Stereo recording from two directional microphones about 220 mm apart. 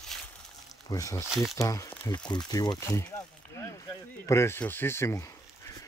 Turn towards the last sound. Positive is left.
turn(degrees=10)  # may be behind; listen again after turning